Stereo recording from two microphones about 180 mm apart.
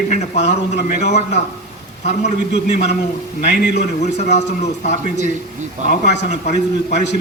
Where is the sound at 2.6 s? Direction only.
40° left (ahead or behind).